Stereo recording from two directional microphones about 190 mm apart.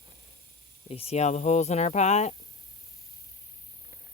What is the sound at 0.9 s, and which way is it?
Speech, 30° left (ahead or behind).